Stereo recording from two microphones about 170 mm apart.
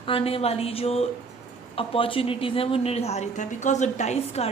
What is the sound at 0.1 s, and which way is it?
Speech, 35° left (ahead or behind).